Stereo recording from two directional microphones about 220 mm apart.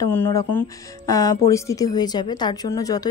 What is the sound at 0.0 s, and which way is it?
Speech, 10° left (ahead or behind).